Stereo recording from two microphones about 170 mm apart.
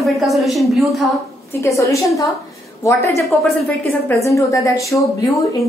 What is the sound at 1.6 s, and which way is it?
A woman's voice, 20° left (ahead or behind).